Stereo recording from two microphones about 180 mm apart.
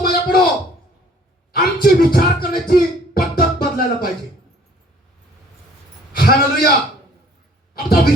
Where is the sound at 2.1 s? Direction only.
55° left (ahead or behind).